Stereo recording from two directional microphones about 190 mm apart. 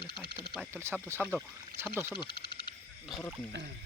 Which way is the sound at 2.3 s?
55° left (ahead or behind).